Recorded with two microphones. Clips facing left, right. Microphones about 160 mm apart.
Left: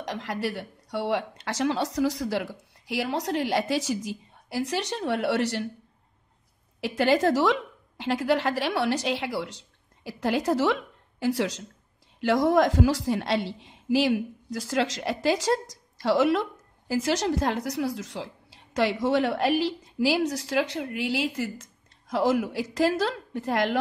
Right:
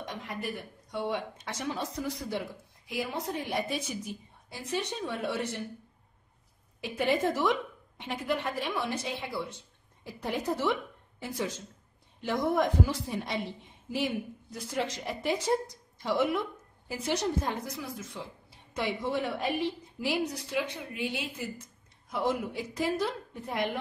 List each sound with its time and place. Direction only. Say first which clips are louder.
0.0 s a woman's voice: left 7 dB; 85° left
6.8 s a woman's voice: left 6 dB; 90° left
12.2 s a woman's voice: left 7 dB; 90° left